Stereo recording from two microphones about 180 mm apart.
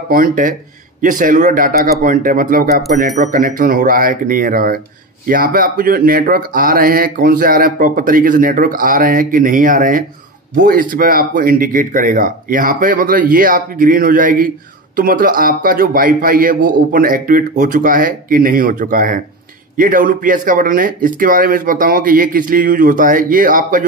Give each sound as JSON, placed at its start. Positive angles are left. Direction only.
{"t": 0.1, "sound": "speech", "side_deg": -50}